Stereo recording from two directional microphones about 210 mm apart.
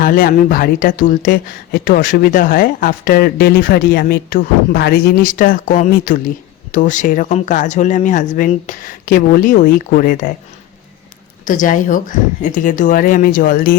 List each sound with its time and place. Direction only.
0.0 s speech: 40° left (ahead or behind)
11.4 s speech: 40° left (ahead or behind)